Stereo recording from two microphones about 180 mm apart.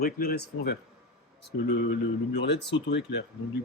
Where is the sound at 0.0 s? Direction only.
55° left (ahead or behind).